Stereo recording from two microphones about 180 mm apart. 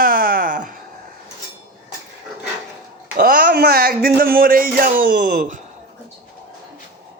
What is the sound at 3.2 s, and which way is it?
Music, 50° right (ahead or behind).